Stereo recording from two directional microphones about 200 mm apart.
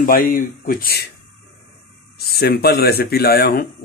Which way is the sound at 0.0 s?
45° left (ahead or behind).